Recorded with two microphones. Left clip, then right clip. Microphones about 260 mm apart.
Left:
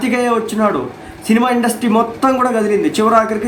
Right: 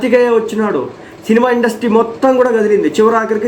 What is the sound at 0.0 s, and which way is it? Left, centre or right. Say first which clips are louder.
A man's voice: right 5 dB; centre.